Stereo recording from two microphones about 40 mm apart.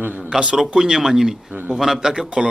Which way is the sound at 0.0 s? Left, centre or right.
Right.